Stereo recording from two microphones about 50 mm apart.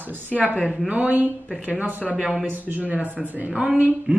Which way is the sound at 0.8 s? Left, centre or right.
Right.